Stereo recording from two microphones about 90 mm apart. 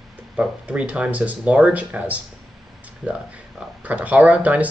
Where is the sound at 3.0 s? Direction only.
5° right (ahead or behind).